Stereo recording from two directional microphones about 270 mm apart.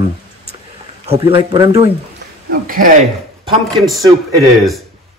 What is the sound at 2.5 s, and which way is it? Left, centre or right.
Speech, right.